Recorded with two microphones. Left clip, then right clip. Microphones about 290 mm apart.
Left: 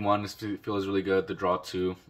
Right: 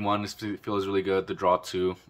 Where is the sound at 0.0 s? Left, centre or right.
Centre.